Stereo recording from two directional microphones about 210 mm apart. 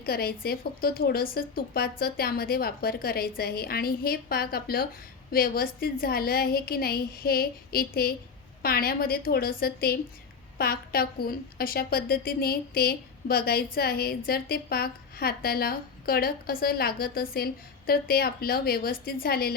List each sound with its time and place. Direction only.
0.0 s a woman's voice: 45° left (ahead or behind)